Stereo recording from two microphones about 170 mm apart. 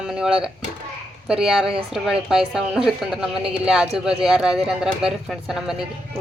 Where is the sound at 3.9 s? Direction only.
35° right (ahead or behind).